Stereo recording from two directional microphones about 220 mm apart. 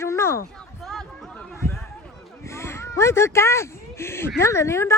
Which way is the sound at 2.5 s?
10° left (ahead or behind).